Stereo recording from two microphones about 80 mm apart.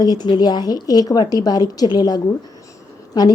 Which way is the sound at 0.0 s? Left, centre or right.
Left.